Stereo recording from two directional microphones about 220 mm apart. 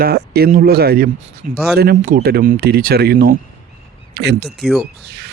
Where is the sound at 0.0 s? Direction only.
45° right (ahead or behind).